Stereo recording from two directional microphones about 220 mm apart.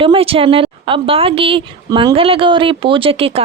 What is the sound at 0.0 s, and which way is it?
Speech, 25° right (ahead or behind).